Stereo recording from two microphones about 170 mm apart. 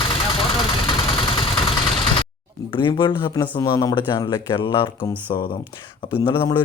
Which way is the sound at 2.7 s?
25° left (ahead or behind).